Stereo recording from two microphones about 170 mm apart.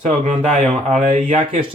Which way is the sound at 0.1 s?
45° right (ahead or behind).